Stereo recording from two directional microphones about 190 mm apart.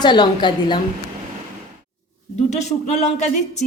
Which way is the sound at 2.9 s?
40° left (ahead or behind).